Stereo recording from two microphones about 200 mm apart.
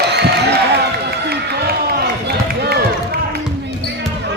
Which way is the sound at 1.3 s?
50° right (ahead or behind).